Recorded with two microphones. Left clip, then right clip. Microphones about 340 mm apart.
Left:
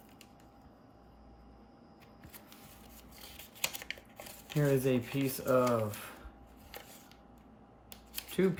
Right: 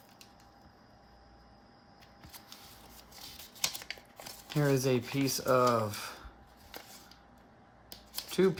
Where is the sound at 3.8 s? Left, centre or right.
Centre.